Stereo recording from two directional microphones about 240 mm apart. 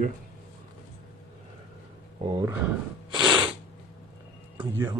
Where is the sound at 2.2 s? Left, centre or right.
Centre.